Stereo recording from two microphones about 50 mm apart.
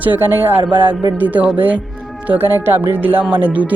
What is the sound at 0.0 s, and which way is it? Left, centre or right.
Speech, right.